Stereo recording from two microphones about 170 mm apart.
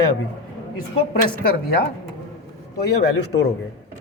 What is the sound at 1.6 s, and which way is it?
Speech, 65° left (ahead or behind).